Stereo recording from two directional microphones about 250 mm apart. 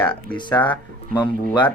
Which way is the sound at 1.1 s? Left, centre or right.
Centre.